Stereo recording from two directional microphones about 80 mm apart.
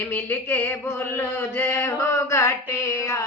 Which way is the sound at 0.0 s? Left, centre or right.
Left.